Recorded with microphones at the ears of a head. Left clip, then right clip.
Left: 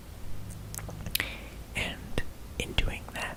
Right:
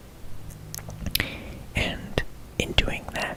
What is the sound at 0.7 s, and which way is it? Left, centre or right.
Whispering, right.